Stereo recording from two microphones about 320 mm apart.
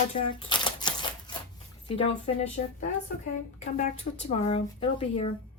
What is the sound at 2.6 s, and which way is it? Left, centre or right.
Speech, left.